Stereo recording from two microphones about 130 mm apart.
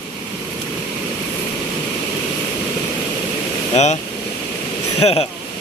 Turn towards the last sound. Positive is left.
turn(degrees=50)  # may be behind; listen again after turning